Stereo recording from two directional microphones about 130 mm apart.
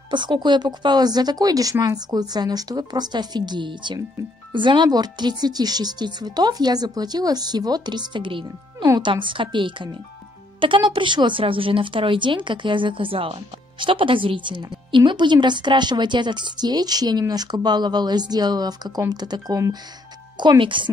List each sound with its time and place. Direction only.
0.1 s a woman's voice: 35° right (ahead or behind)
20.3 s a woman's voice: 40° right (ahead or behind)